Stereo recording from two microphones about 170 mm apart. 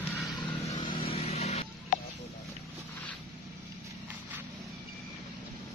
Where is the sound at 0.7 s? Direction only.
30° left (ahead or behind).